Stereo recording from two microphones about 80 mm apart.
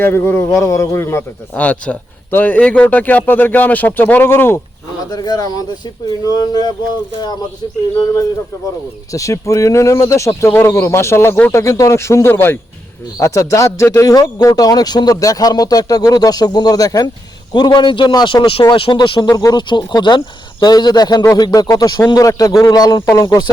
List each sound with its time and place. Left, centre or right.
0.0 s speech: left
1.5 s a man's voice: centre
5.1 s speech: left
9.1 s speech: left
10.5 s a man's voice: left
13.1 s speech: left
14.4 s speech: left
17.5 s a man's voice: left
19.3 s speech: left
19.5 s speech: left
22.6 s speech: left